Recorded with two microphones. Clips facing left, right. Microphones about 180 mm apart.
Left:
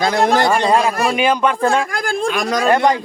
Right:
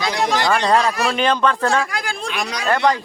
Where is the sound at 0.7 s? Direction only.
10° left (ahead or behind).